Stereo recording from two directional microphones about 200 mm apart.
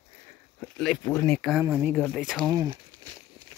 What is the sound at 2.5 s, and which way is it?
Speech, 15° right (ahead or behind).